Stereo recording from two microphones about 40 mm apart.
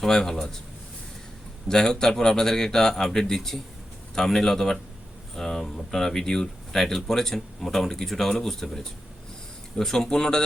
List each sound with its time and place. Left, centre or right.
0.0 s speech: centre
1.6 s speech: centre